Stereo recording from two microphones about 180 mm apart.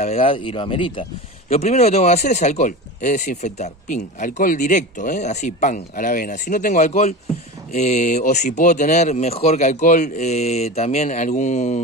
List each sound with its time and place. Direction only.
0.0 s speech: 30° left (ahead or behind)